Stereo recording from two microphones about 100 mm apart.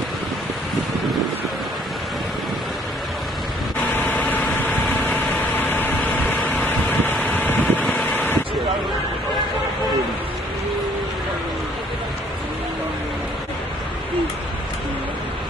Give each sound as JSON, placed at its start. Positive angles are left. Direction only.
{"t": 4.0, "sound": "vehicle", "side_deg": 15}
{"t": 7.9, "sound": "wind", "side_deg": 15}